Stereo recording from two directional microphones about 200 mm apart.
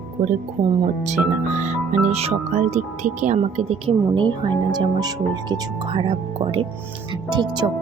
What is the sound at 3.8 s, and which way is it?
Speech, 25° right (ahead or behind).